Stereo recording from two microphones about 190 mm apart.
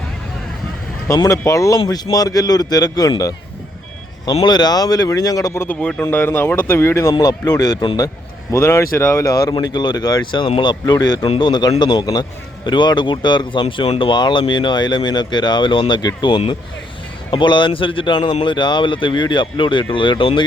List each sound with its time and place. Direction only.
1.0 s speech: 15° left (ahead or behind)
4.4 s speech: 20° left (ahead or behind)